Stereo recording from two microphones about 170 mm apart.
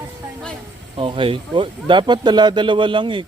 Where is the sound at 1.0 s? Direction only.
30° right (ahead or behind).